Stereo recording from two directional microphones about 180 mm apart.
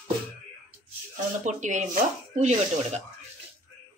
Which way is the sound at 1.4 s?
40° right (ahead or behind).